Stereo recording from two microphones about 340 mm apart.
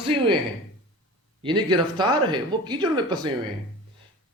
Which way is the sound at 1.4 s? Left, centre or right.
Centre.